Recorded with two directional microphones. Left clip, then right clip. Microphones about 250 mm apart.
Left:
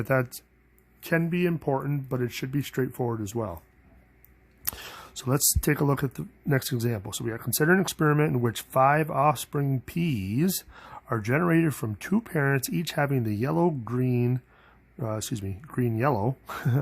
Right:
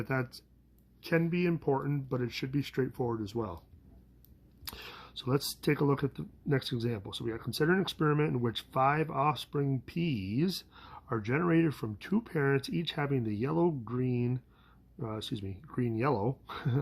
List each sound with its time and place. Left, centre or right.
0.0 s speech: left
4.7 s speech: left